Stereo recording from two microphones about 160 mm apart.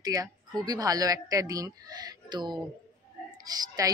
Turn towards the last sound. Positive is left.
turn(degrees=-25)  # may be behind; listen again after turning